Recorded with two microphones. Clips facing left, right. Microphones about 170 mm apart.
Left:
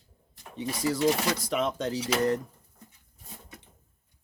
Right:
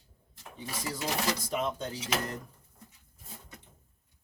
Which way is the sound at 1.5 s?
80° left.